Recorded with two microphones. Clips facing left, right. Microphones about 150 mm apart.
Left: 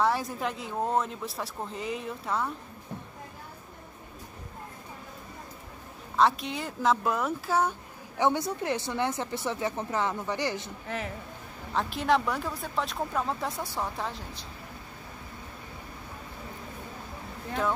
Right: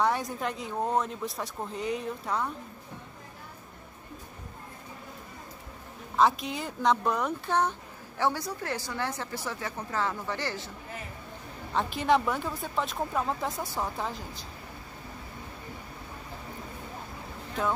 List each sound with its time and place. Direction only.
0.0 s speech: centre (ahead or behind)
6.1 s speech: centre (ahead or behind)
8.2 s speech: 20° left (ahead or behind)
10.9 s speech: 80° left
11.7 s speech: centre (ahead or behind)